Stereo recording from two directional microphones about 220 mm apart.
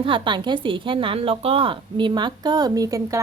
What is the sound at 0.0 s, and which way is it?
A woman's voice, 20° right (ahead or behind).